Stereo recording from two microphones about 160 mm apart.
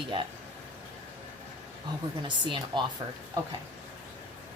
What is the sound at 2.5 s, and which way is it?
Speech, 30° right (ahead or behind).